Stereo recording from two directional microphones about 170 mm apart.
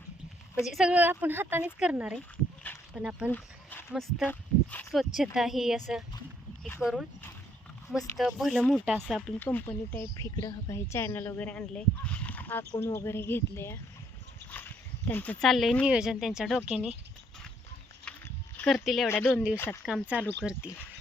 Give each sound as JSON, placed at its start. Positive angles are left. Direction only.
{"t": 0.6, "sound": "speech", "side_deg": 0}
{"t": 3.3, "sound": "speech", "side_deg": 10}
{"t": 3.9, "sound": "speech", "side_deg": 0}
{"t": 7.9, "sound": "speech", "side_deg": 15}
{"t": 8.2, "sound": "speech", "side_deg": 0}
{"t": 9.4, "sound": "speech", "side_deg": 10}
{"t": 18.5, "sound": "speech", "side_deg": 5}
{"t": 19.0, "sound": "speech", "side_deg": 15}
{"t": 19.3, "sound": "speech", "side_deg": -5}
{"t": 19.5, "sound": "speech", "side_deg": 15}
{"t": 19.8, "sound": "speech", "side_deg": -5}